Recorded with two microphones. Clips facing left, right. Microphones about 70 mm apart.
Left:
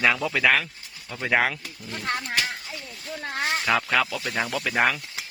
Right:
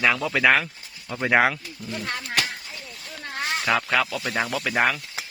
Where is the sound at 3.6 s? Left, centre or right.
Centre.